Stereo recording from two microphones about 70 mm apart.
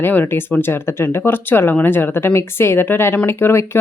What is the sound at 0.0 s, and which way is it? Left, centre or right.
A woman's voice, left.